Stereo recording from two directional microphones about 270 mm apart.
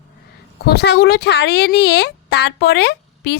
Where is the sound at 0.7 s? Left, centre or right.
Left.